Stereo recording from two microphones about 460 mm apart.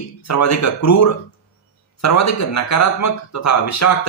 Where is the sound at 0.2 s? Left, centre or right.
Left.